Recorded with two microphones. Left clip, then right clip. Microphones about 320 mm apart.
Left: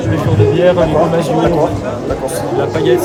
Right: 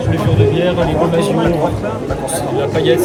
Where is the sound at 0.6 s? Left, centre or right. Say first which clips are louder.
Left 4 dB; centre.